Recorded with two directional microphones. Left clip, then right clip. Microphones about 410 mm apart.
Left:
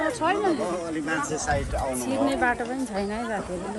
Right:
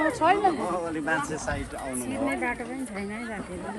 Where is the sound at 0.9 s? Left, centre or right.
Centre.